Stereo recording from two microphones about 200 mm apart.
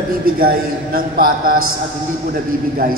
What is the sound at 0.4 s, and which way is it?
A man's voice, 45° right (ahead or behind).